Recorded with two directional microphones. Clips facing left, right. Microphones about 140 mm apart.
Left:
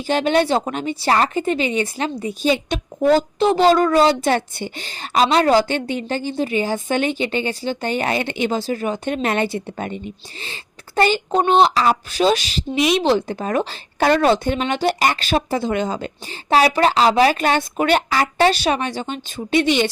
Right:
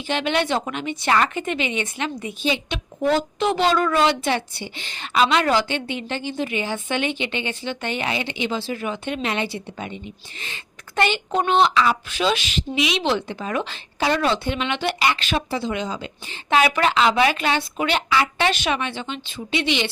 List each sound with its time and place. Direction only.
0.1 s speech: 40° left (ahead or behind)
10.4 s speech: 35° left (ahead or behind)
16.5 s speech: 35° left (ahead or behind)